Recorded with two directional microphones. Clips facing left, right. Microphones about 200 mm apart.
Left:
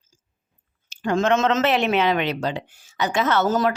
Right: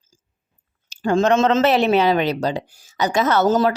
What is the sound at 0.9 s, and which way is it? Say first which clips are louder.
Speech: right 3 dB; 35° right (ahead or behind).